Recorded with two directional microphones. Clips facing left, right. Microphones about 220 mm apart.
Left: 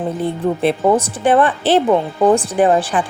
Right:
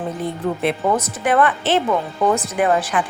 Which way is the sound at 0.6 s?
30° left (ahead or behind).